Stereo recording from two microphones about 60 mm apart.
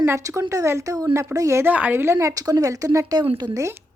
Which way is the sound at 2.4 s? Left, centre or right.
Right.